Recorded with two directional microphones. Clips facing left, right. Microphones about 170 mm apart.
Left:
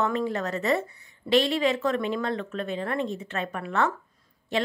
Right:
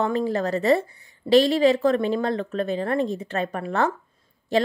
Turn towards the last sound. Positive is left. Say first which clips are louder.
# right 5 dB
turn(degrees=-35)  # may be behind; listen again after turning